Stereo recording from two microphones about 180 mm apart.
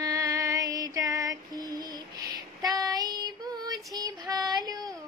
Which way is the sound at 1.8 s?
20° right (ahead or behind).